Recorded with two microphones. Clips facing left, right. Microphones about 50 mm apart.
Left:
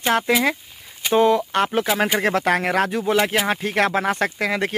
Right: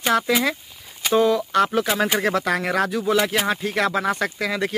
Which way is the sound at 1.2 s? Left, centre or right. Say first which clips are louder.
Left 1 dB; left.